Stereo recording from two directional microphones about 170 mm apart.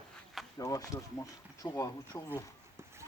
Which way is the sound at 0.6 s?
20° left (ahead or behind).